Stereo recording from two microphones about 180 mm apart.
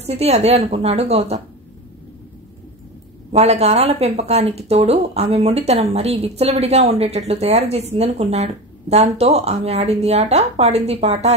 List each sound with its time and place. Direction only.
0.0 s speech: 35° right (ahead or behind)
3.3 s speech: 35° right (ahead or behind)